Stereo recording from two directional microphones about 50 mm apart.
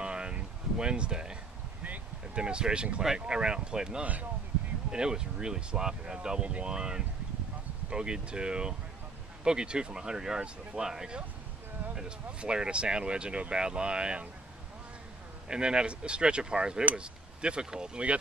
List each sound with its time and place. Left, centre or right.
0.0 s a sound: centre
2.3 s speech: centre
4.0 s speech: right
4.9 s speech: centre
15.4 s speech: centre